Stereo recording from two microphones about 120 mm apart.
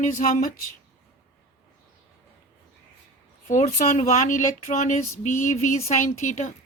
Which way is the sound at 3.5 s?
90° left.